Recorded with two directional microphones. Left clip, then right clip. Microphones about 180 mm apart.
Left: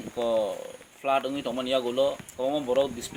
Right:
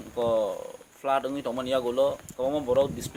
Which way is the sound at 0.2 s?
10° right (ahead or behind).